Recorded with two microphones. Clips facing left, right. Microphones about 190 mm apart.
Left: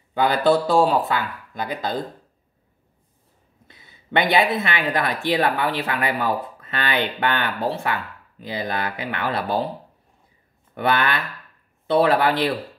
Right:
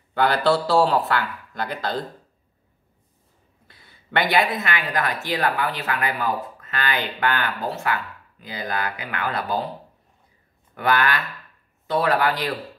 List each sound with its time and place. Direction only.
0.1 s speech: 15° left (ahead or behind)
3.6 s speech: 20° left (ahead or behind)
10.7 s speech: 25° left (ahead or behind)